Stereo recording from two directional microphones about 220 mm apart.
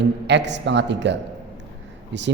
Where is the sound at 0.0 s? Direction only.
50° right (ahead or behind).